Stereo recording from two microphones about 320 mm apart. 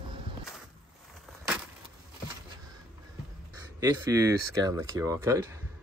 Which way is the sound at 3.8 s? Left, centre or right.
Centre.